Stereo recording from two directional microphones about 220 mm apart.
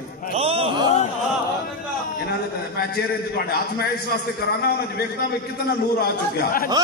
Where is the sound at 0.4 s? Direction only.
25° right (ahead or behind).